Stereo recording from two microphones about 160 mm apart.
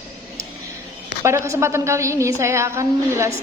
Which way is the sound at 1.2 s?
15° right (ahead or behind).